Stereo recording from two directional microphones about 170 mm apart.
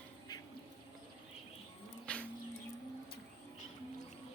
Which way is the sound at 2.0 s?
5° left (ahead or behind).